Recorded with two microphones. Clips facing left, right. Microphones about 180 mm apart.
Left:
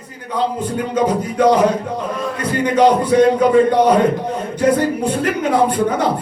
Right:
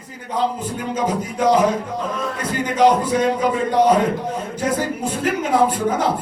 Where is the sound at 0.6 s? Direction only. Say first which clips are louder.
Left 5 dB; 65° left (ahead or behind).